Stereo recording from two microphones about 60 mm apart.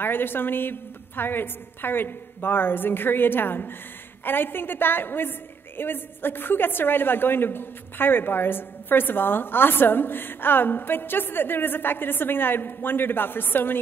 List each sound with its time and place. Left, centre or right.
0.0 s a woman's voice: left